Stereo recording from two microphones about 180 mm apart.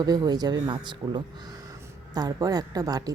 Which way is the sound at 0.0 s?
20° right (ahead or behind).